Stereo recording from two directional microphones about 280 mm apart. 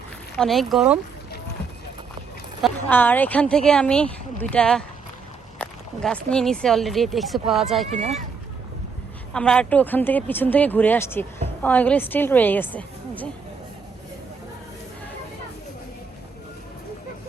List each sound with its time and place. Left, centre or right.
0.3 s speech: centre
2.6 s speech: centre
7.9 s speech: right
9.3 s speech: centre